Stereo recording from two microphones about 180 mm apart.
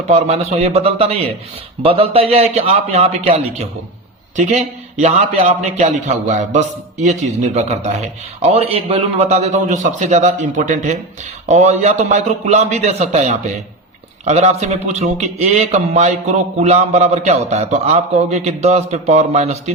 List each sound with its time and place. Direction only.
0.1 s a man's voice: 35° right (ahead or behind)